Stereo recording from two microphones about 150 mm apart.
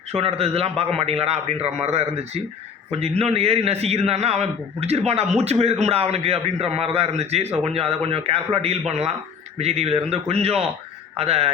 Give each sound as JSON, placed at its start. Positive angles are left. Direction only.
{"t": 0.1, "sound": "a man's voice", "side_deg": -40}